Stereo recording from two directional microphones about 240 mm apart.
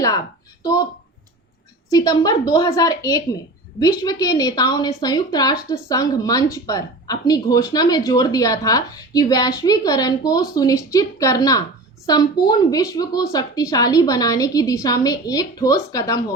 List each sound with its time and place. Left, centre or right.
0.6 s speech: centre
1.9 s a woman's voice: centre